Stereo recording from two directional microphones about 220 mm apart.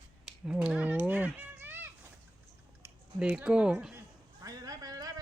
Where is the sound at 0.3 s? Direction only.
5° right (ahead or behind).